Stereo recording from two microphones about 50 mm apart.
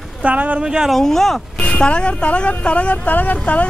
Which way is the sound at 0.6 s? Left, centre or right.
Centre.